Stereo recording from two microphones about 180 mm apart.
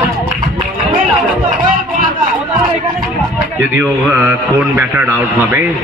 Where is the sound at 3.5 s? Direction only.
10° right (ahead or behind).